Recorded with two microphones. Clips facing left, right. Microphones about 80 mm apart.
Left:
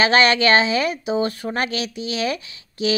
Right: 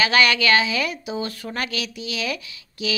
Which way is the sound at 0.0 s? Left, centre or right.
Left.